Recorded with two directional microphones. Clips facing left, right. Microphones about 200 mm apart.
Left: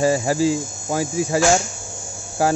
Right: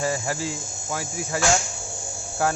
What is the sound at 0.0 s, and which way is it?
Cricket, 15° left (ahead or behind).